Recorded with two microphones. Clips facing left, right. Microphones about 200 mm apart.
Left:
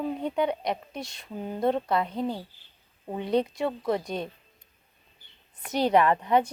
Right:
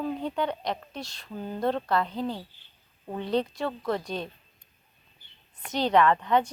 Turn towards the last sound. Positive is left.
turn(degrees=5)  # may be behind; listen again after turning